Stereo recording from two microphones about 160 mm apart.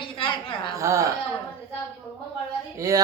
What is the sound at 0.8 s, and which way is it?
Speech, 20° right (ahead or behind).